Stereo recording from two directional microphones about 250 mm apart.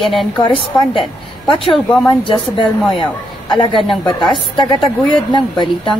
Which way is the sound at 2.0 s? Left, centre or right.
Centre.